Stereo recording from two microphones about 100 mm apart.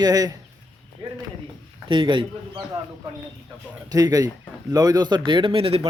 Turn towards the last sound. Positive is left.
turn(degrees=-65)  # may be behind; listen again after turning